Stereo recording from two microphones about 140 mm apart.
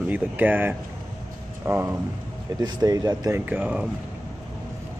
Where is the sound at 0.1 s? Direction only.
10° right (ahead or behind).